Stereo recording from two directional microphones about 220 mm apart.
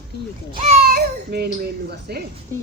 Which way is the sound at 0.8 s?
45° right (ahead or behind).